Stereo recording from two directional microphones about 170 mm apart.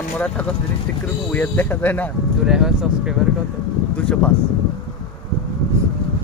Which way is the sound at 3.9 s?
5° left (ahead or behind).